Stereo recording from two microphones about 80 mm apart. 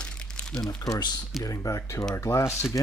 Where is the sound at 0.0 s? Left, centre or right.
Centre.